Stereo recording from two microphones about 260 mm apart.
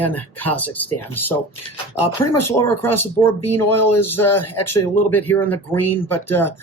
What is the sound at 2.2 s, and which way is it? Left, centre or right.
Speech, left.